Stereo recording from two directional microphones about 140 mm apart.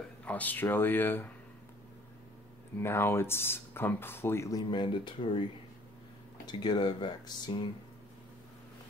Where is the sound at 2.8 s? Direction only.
15° left (ahead or behind); by 5.4 s 35° left (ahead or behind).